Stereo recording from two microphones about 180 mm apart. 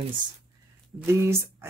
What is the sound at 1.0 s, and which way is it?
Speech, 15° right (ahead or behind).